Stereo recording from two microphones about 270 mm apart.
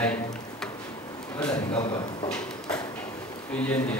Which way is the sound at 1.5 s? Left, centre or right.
Centre.